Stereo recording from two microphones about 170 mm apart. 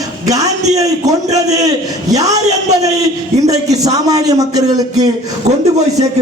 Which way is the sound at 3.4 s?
20° right (ahead or behind).